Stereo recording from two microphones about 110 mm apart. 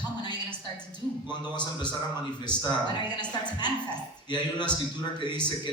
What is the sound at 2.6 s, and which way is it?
A woman's voice, 40° left (ahead or behind).